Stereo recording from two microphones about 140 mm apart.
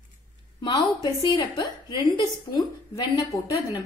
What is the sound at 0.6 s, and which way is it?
A woman's voice, 30° left (ahead or behind).